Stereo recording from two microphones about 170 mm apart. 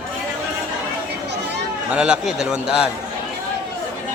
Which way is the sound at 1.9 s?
5° right (ahead or behind).